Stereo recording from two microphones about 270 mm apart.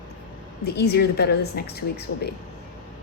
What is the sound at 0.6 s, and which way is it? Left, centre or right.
A woman's voice, left.